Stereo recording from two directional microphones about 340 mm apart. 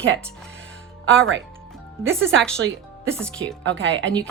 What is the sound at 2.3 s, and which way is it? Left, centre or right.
Speech, centre.